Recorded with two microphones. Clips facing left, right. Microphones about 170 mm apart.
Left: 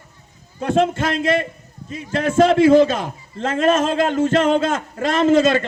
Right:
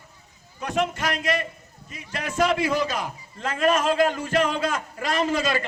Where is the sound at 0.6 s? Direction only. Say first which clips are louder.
Left 8 dB; 25° left (ahead or behind).